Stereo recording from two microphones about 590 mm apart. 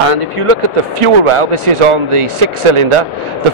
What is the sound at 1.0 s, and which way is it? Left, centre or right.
Speech, right.